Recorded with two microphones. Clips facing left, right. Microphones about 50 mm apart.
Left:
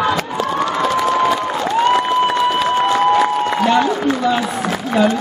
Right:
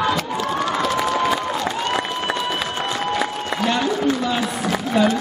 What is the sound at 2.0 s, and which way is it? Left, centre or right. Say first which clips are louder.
Applause: left 9 dB; centre.